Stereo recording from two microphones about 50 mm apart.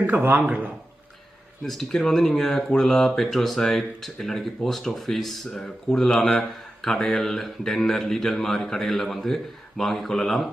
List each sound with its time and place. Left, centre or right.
0.2 s speech: right
1.6 s a man's voice: centre